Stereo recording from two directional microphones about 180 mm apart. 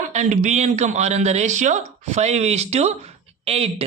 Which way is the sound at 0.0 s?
40° right (ahead or behind).